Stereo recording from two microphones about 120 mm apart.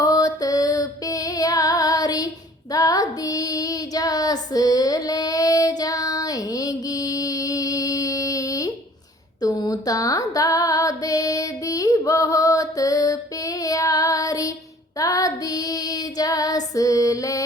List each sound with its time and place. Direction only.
0.0 s female singing: 30° left (ahead or behind)
2.7 s child singing: 30° left (ahead or behind)
9.4 s music: 30° left (ahead or behind)
14.9 s child singing: 30° left (ahead or behind)